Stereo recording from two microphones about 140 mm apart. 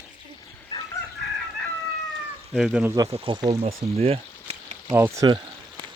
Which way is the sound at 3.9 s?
45° right (ahead or behind).